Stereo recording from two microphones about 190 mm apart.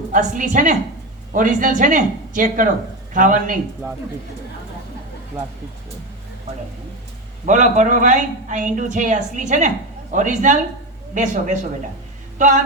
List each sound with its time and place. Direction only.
0.1 s speech: 40° right (ahead or behind)
7.4 s a woman's voice: 40° right (ahead or behind)